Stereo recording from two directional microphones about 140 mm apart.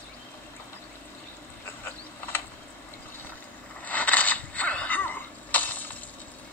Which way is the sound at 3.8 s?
10° left (ahead or behind).